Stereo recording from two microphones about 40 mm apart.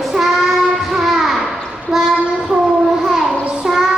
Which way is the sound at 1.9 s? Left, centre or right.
Centre.